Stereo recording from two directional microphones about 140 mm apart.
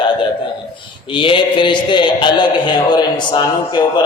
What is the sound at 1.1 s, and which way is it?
A man's voice, 35° left (ahead or behind).